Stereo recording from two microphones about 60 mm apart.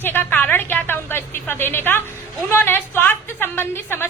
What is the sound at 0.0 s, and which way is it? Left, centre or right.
A woman's voice, left.